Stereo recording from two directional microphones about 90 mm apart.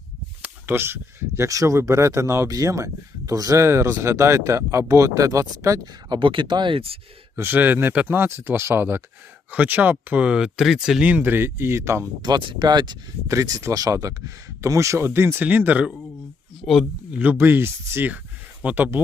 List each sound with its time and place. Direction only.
0.4 s speech: 25° right (ahead or behind)
6.1 s speech: 65° right (ahead or behind); by 7.0 s 90° right
7.3 s speech: 25° right (ahead or behind); by 11.0 s 5° right (ahead or behind)
11.0 s speech: 20° right (ahead or behind)
12.2 s speech: 60° right (ahead or behind)
13.2 s speech: 40° right (ahead or behind); by 15.9 s 20° right (ahead or behind)
16.6 s speech: 5° left (ahead or behind)
17.2 s speech: 20° right (ahead or behind)